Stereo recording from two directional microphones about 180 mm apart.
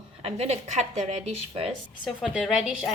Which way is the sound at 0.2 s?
35° right (ahead or behind).